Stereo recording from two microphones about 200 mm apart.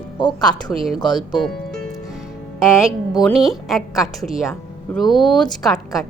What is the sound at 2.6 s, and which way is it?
A woman's voice, 5° right (ahead or behind).